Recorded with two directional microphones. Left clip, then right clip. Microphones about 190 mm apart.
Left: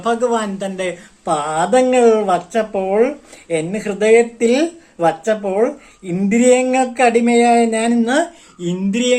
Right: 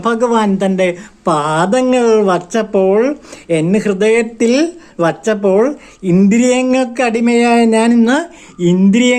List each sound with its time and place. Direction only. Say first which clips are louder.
0.0 s speech: right 4 dB; 45° right (ahead or behind)